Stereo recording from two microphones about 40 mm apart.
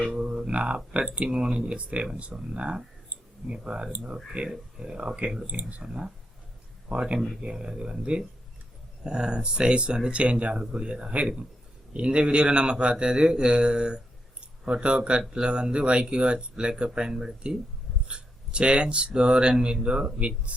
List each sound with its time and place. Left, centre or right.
0.2 s music: right
0.5 s speech: right
7.4 s speech: right